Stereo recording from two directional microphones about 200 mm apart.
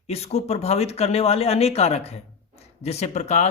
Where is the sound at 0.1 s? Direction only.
30° left (ahead or behind).